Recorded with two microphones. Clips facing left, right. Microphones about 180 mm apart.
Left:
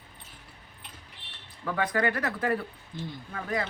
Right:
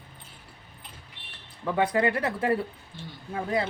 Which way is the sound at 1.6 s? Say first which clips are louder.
Right 3 dB; 25° right (ahead or behind).